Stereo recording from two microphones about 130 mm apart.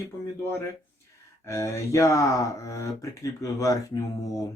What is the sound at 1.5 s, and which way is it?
Speech, 20° left (ahead or behind).